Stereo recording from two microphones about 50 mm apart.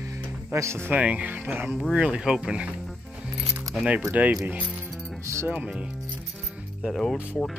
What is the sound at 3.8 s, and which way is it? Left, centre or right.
Speech, centre.